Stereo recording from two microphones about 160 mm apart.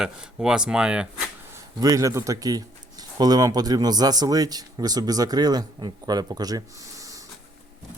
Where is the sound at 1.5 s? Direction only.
20° right (ahead or behind).